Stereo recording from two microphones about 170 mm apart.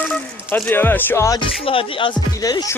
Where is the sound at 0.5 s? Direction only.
10° left (ahead or behind).